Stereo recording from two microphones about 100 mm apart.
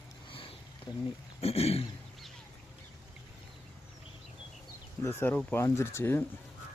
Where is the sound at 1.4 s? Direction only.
85° left.